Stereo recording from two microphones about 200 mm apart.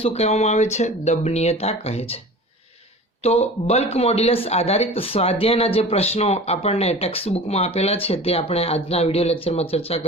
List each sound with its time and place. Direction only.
0.0 s speech: 30° left (ahead or behind)
3.2 s speech: 30° left (ahead or behind)